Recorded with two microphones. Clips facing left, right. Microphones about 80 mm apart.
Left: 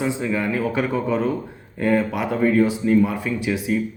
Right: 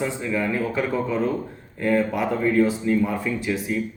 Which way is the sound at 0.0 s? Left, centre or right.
Centre.